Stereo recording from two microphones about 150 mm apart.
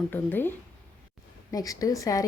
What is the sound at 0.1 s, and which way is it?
A woman's voice, 15° left (ahead or behind).